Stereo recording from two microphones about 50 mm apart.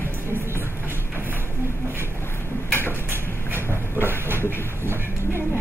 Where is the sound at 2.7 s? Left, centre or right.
Left.